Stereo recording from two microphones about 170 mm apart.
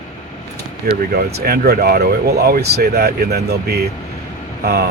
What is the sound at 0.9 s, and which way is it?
Speech, 65° right (ahead or behind).